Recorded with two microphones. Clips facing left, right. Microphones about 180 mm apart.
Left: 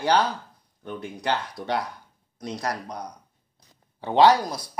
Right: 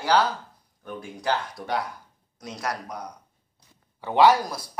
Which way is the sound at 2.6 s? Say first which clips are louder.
Even; 30° left (ahead or behind).